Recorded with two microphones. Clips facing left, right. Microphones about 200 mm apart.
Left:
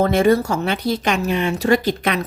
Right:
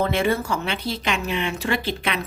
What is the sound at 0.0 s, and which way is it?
A woman's voice, 45° left (ahead or behind).